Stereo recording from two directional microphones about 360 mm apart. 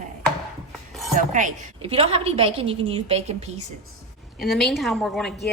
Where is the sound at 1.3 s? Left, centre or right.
Right.